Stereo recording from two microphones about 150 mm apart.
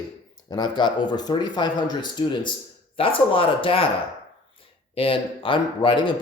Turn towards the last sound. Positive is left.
turn(degrees=30)  # may be behind; listen again after turning